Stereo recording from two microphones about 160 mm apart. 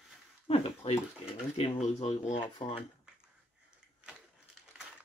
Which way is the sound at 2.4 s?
30° left (ahead or behind).